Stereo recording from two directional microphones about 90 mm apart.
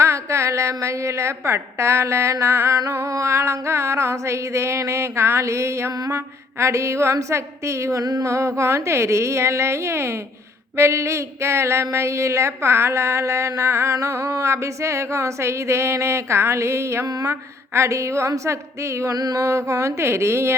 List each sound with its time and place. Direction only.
0.0 s a woman's voice: 35° right (ahead or behind)